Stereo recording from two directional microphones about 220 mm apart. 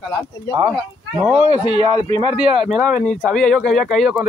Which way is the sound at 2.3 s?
5° right (ahead or behind).